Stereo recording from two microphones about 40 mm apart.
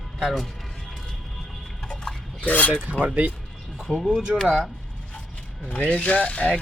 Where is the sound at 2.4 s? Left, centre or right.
Left.